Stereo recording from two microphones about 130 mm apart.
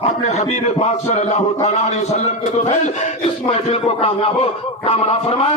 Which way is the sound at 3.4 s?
50° left (ahead or behind).